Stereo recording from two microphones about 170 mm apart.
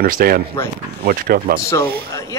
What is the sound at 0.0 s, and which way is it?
Speech, 60° right (ahead or behind).